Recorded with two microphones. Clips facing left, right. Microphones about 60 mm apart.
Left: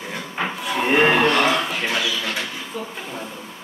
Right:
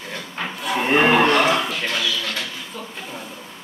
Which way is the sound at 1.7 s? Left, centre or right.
Centre.